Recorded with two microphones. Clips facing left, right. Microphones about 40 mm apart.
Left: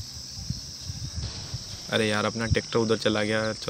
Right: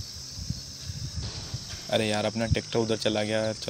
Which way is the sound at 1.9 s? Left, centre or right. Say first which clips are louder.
Left 1 dB; centre.